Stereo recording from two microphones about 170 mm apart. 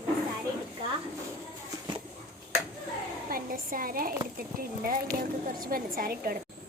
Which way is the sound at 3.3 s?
55° right (ahead or behind).